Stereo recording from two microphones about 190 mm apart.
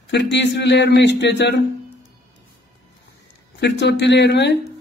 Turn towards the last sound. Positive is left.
turn(degrees=65)  # may be behind; listen again after turning